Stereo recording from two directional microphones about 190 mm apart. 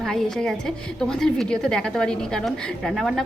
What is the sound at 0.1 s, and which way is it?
A woman's voice, 5° left (ahead or behind).